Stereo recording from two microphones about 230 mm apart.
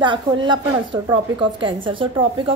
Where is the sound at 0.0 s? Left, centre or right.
Right.